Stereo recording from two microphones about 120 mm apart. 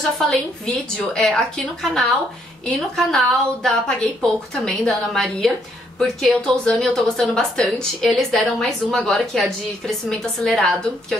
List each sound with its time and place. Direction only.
0.3 s a woman's voice: 10° left (ahead or behind)